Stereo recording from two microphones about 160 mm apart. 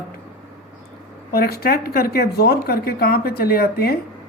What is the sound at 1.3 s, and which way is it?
Speech, 75° left (ahead or behind).